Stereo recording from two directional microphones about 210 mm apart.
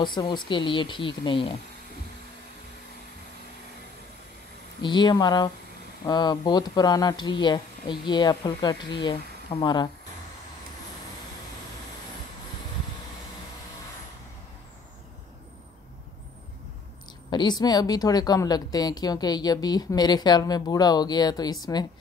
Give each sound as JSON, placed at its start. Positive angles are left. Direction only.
{"t": 0.0, "sound": "speech", "side_deg": 20}
{"t": 4.8, "sound": "speech", "side_deg": 20}
{"t": 17.3, "sound": "speech", "side_deg": 20}